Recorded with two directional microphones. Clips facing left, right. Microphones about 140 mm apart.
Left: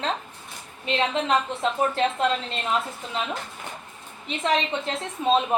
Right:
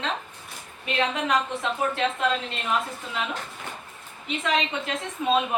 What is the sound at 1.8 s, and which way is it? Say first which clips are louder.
Speech: left 2 dB; 40° left (ahead or behind).